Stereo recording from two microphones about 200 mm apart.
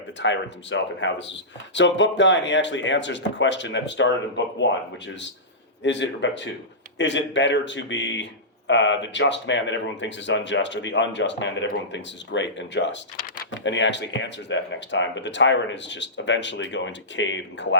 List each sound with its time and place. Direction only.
0.2 s speech: 65° left (ahead or behind)